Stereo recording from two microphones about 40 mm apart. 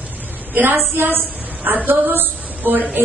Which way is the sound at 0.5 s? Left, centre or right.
Right.